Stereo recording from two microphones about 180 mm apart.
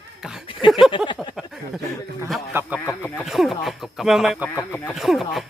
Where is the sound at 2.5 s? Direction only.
15° right (ahead or behind).